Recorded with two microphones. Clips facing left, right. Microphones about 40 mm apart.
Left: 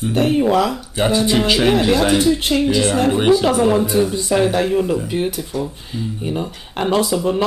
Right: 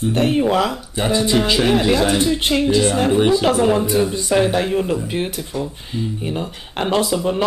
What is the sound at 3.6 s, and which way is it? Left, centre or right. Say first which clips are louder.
Speech: left 1 dB; centre.